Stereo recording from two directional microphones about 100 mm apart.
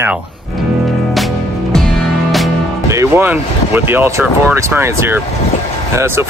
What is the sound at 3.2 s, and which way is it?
Speech, 20° right (ahead or behind).